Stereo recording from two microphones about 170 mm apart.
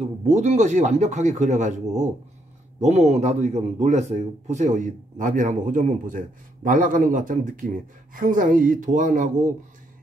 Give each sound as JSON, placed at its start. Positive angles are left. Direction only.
{"t": 0.3, "sound": "a man's voice", "side_deg": -40}
{"t": 2.8, "sound": "a man's voice", "side_deg": -40}